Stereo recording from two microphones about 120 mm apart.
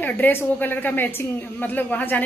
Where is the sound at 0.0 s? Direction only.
15° left (ahead or behind).